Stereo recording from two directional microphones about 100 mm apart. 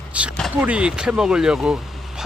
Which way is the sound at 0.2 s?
15° right (ahead or behind).